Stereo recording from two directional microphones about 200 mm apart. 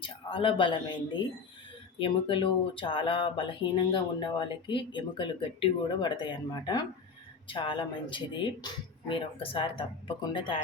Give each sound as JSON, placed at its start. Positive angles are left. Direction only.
{"t": 0.0, "sound": "speech", "side_deg": 25}
{"t": 2.0, "sound": "speech", "side_deg": 25}